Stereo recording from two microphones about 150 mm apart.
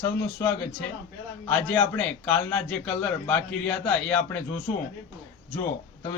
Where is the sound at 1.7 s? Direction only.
10° left (ahead or behind).